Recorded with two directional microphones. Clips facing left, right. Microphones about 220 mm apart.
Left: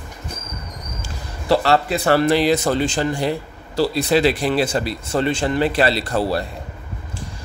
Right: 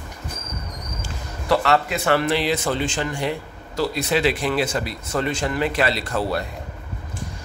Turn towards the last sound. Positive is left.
turn(degrees=35)  # may be behind; listen again after turning